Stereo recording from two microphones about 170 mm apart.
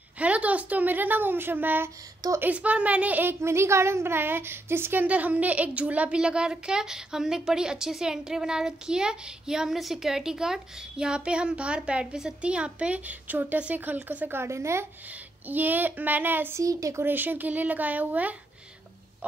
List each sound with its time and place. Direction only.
0.2 s speech: 10° right (ahead or behind)